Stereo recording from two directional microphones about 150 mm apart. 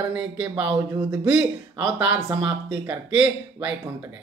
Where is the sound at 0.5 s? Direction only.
30° right (ahead or behind).